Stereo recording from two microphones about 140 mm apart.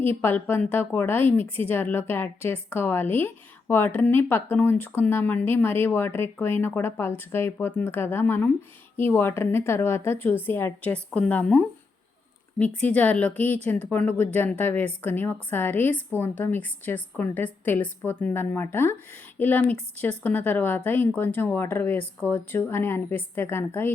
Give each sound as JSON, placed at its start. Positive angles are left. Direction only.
{"t": 0.0, "sound": "a woman's voice", "side_deg": 15}
{"t": 12.8, "sound": "a woman's voice", "side_deg": 10}